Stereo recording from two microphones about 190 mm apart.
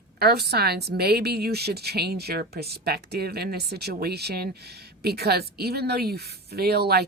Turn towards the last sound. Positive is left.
turn(degrees=-55)  # may be behind; listen again after turning